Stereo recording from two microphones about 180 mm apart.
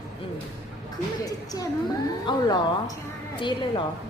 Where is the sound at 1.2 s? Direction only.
20° left (ahead or behind).